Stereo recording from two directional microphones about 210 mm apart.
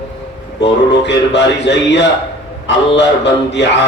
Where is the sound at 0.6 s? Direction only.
55° left (ahead or behind).